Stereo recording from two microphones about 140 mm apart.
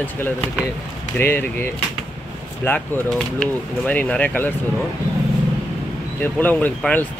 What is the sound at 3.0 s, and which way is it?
Speech, 5° left (ahead or behind).